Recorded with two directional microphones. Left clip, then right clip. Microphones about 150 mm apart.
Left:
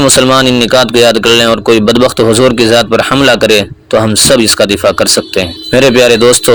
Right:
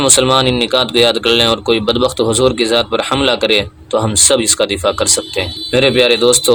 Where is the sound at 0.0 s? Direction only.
40° left (ahead or behind).